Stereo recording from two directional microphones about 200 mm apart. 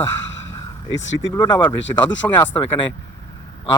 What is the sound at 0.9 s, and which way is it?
Speech, 70° left (ahead or behind).